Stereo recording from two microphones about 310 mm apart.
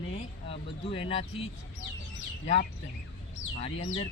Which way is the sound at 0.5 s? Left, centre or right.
Centre.